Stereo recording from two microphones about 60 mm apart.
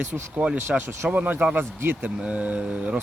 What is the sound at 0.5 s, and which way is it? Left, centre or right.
Speech, right.